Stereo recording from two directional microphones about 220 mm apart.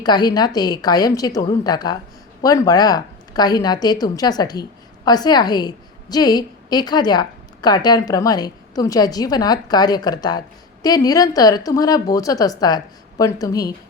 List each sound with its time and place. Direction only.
0.0 s a woman's voice: 20° left (ahead or behind)